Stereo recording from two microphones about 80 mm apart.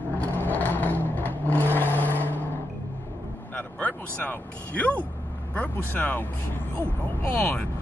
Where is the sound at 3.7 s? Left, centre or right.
Centre.